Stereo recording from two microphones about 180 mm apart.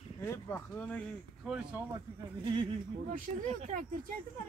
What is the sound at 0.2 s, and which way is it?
Speech, 10° left (ahead or behind).